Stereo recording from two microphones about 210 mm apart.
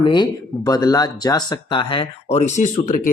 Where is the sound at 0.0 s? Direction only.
20° left (ahead or behind).